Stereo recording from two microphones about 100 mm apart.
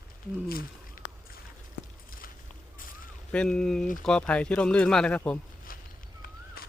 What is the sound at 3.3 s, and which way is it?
Speech, 10° left (ahead or behind).